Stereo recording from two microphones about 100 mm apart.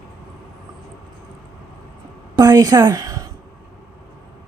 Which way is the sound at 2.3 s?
40° right (ahead or behind).